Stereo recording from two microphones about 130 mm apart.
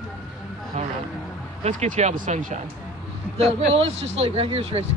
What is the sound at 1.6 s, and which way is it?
Speech, 60° right (ahead or behind).